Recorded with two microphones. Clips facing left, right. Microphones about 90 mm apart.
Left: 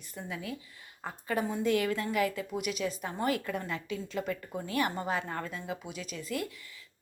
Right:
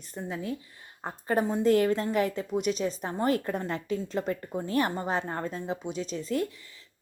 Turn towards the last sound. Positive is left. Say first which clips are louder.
# right 6 dB
turn(degrees=-30)  # may be behind; listen again after turning